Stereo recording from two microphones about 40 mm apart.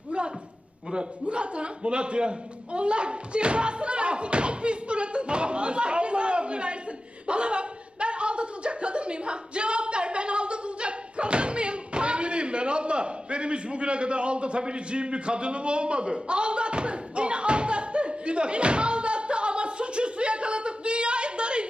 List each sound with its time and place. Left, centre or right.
0.9 s a man's voice: right
7.2 s chuckle: right